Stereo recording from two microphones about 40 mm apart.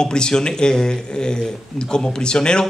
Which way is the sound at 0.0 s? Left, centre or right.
Left.